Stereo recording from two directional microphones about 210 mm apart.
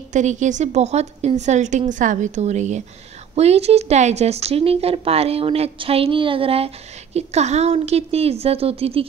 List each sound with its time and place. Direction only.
0.1 s a woman's voice: 35° right (ahead or behind)